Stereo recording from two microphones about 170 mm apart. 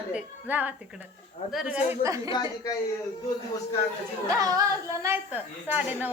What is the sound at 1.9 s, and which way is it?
Speech, 20° right (ahead or behind).